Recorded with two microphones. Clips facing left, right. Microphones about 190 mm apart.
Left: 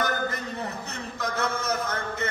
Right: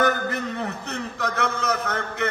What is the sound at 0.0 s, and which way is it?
A man's voice, 70° right (ahead or behind).